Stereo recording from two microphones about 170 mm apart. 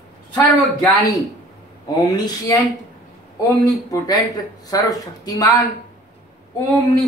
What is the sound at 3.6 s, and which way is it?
Speech, 20° left (ahead or behind).